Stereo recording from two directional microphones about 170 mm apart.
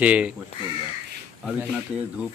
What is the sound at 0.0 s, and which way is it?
Speech, 5° right (ahead or behind).